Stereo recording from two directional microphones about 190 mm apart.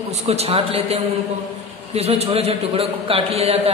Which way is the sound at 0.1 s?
35° right (ahead or behind).